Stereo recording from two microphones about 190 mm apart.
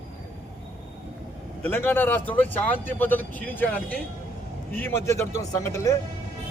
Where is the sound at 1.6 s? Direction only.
10° left (ahead or behind).